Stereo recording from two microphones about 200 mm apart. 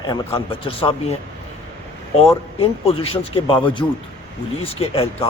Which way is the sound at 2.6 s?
30° left (ahead or behind).